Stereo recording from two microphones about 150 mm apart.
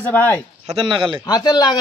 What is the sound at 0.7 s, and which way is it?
Speech, 35° right (ahead or behind).